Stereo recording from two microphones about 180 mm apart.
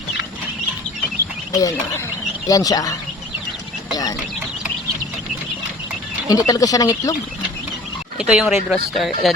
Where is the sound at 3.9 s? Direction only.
20° left (ahead or behind).